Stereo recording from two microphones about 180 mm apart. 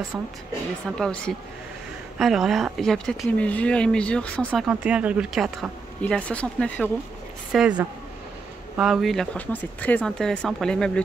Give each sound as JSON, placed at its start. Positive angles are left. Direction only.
{"t": 0.9, "sound": "speech", "side_deg": 5}
{"t": 4.6, "sound": "speech", "side_deg": -5}
{"t": 7.5, "sound": "speech", "side_deg": -5}